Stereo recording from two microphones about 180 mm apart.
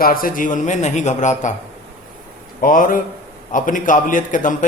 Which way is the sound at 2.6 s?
50° left (ahead or behind).